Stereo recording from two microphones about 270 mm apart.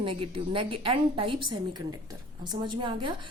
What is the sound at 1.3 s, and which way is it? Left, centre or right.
Speech, right.